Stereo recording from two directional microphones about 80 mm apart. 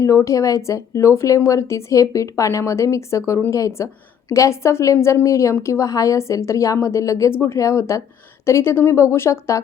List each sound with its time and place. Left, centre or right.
0.0 s a woman's voice: left